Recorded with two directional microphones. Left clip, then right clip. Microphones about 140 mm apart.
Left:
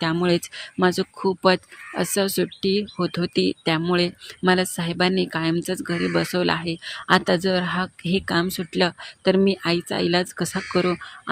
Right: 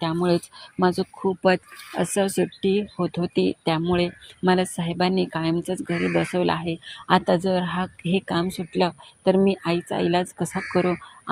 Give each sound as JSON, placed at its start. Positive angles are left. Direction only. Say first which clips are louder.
{"t": 0.0, "sound": "speech", "louder": "left 1 dB", "side_deg": 30}
{"t": 1.4, "sound": "speech", "louder": "left 1 dB", "side_deg": 20}
{"t": 2.6, "sound": "speech", "louder": "even", "side_deg": 25}
{"t": 8.5, "sound": "speech", "louder": "left 1 dB", "side_deg": 35}